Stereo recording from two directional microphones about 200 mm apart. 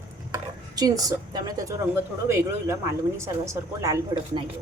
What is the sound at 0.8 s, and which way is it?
Speech, 20° right (ahead or behind).